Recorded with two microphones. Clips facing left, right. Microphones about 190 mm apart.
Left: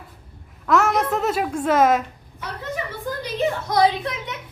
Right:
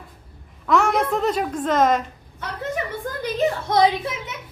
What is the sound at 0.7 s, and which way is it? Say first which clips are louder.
A child's voice: even; centre (ahead or behind).